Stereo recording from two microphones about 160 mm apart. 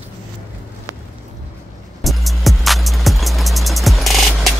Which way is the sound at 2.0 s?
Centre (ahead or behind).